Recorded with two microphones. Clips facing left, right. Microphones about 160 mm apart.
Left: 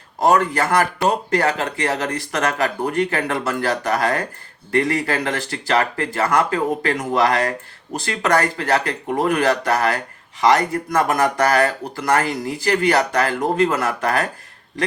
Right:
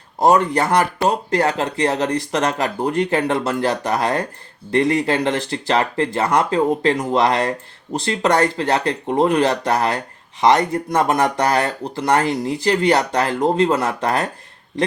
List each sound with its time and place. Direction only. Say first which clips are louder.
0.3 s speech: right 2 dB; 20° right (ahead or behind)